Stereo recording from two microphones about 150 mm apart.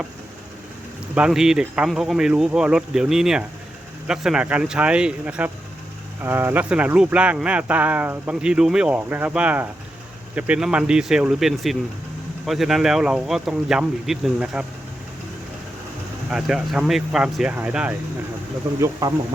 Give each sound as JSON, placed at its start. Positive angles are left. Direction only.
{"t": 1.1, "sound": "speech", "side_deg": -5}
{"t": 16.3, "sound": "speech", "side_deg": -5}
{"t": 18.8, "sound": "speech", "side_deg": -25}